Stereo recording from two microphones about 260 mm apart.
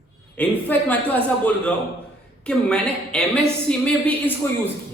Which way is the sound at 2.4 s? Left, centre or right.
Centre.